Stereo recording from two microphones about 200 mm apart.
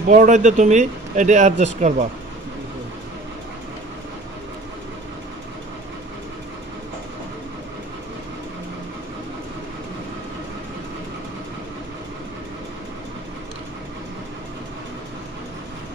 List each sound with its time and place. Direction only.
0.1 s speech: 40° right (ahead or behind)